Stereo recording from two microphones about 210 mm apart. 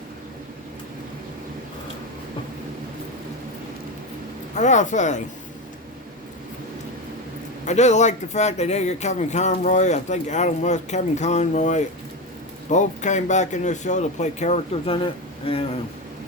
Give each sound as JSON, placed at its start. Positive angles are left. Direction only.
{"t": 4.5, "sound": "speech", "side_deg": 35}
{"t": 7.6, "sound": "speech", "side_deg": 35}